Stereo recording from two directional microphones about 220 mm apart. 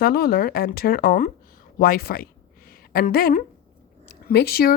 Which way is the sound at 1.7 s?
40° left (ahead or behind).